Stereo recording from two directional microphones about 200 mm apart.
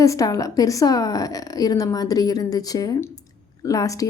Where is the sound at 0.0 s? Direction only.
15° left (ahead or behind).